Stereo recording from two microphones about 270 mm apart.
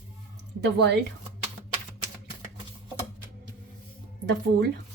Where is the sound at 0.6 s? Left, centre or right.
Right.